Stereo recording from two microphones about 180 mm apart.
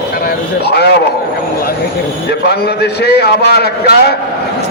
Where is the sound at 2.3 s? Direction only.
65° left (ahead or behind).